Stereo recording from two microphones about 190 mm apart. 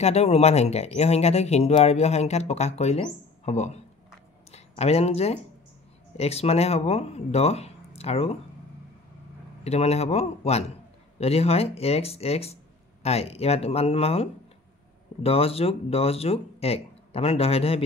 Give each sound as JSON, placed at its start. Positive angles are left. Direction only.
{"t": 0.0, "sound": "speech", "side_deg": 35}
{"t": 9.6, "sound": "speech", "side_deg": 35}